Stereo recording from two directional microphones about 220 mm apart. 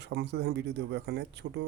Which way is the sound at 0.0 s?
50° right (ahead or behind).